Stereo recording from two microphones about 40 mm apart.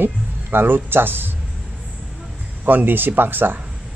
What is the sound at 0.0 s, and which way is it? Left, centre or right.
Music, right.